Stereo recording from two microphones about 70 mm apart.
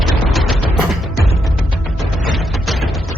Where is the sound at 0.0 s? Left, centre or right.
Centre.